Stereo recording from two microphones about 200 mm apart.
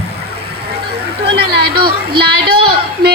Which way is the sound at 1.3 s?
55° right (ahead or behind).